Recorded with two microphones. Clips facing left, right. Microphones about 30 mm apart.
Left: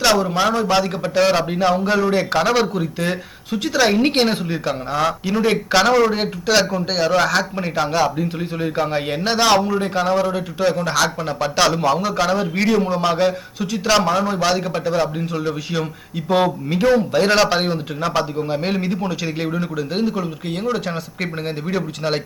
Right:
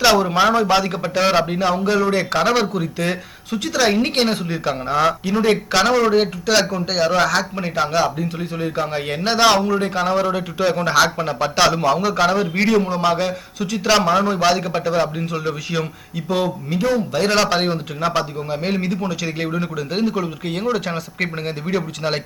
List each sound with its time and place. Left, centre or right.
0.0 s a man's voice: centre
4.7 s a man's voice: centre
6.7 s a man's voice: centre
7.0 s a man's voice: centre
9.2 s a man's voice: centre
16.7 s a man's voice: left
17.1 s a man's voice: centre
18.9 s a man's voice: centre
19.7 s a man's voice: centre